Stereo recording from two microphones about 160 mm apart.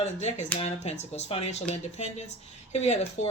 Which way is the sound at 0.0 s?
45° left (ahead or behind).